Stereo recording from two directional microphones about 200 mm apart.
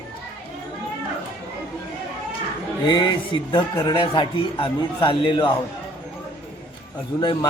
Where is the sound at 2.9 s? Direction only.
25° left (ahead or behind).